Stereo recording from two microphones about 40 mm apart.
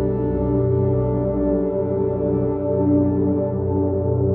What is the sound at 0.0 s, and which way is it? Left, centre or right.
Music, centre.